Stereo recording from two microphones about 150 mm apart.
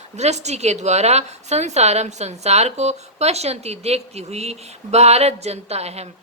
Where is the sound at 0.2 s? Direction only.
50° right (ahead or behind).